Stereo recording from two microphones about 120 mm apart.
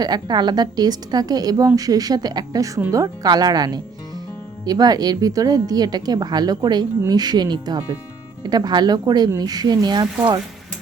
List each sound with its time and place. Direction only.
0.0 s a woman's voice: 35° right (ahead or behind)